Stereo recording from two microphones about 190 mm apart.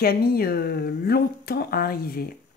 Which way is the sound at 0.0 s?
55° left (ahead or behind).